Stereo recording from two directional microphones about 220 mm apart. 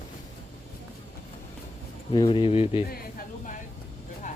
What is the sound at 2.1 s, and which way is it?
Speech, 20° left (ahead or behind).